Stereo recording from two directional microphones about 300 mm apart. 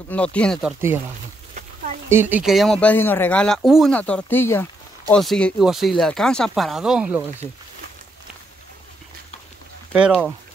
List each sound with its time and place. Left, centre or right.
0.1 s speech: centre
2.0 s speech: centre